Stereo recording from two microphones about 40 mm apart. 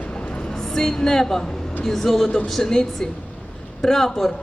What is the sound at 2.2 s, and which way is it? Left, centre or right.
Speech, left.